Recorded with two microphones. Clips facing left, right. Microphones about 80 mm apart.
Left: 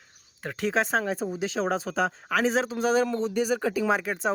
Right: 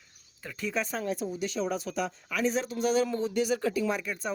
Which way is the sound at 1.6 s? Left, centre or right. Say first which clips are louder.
Left 4 dB; left.